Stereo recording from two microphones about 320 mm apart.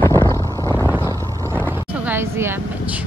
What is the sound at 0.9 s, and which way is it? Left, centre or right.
Boat, centre.